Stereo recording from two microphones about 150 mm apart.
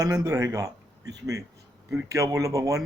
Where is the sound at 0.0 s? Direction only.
25° right (ahead or behind).